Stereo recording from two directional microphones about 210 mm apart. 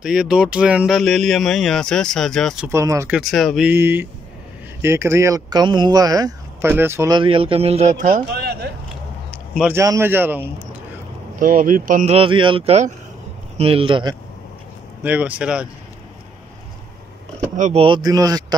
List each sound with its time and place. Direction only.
0.0 s speech: 5° right (ahead or behind)
2.7 s a man's voice: 15° right (ahead or behind)
3.2 s a man's voice: centre (ahead or behind); by 8.6 s 50° right (ahead or behind)
9.5 s a man's voice: 5° right (ahead or behind)
11.3 s speech: 40° right (ahead or behind); by 14.1 s 25° right (ahead or behind)
15.0 s speech: 5° right (ahead or behind)
17.6 s speech: 35° right (ahead or behind)
17.8 s a man's voice: 20° right (ahead or behind)